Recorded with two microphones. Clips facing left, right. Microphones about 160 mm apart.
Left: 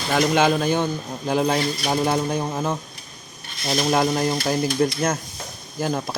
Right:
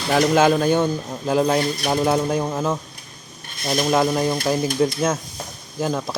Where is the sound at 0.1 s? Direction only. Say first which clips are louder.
Right 3 dB; centre (ahead or behind).